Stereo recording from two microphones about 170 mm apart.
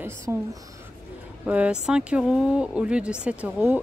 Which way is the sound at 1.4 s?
5° right (ahead or behind).